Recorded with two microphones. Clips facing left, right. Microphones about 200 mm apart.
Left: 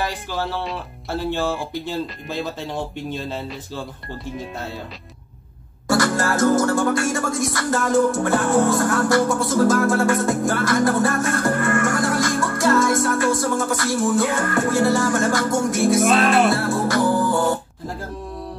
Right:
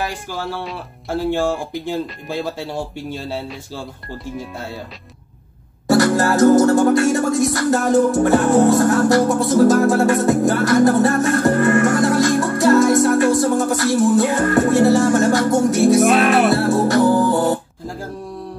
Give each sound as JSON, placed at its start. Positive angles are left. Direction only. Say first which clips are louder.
{"t": 1.1, "sound": "speech", "louder": "right 4 dB", "side_deg": -15}
{"t": 6.1, "sound": "music", "louder": "right 7 dB", "side_deg": -20}